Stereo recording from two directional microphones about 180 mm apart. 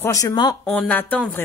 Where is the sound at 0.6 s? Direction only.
5° left (ahead or behind).